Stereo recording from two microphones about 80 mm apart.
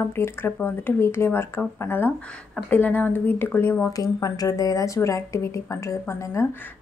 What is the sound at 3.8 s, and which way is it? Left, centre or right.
Speech, left.